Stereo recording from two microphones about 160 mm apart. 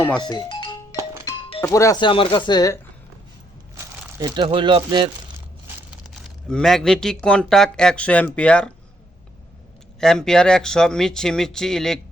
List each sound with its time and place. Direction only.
0.2 s music: 25° left (ahead or behind)
1.6 s speech: 20° left (ahead or behind)
4.2 s speech: 30° right (ahead or behind)
5.9 s speech: centre (ahead or behind)
10.0 s speech: 5° left (ahead or behind)